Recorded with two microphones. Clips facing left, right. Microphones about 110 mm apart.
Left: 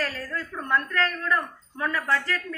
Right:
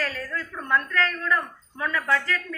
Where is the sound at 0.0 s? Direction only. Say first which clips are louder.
Even; 30° left (ahead or behind).